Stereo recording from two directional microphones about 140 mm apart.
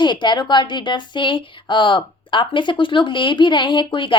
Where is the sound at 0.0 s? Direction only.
35° left (ahead or behind).